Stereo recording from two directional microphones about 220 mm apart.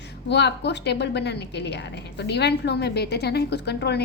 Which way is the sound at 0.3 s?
50° left (ahead or behind).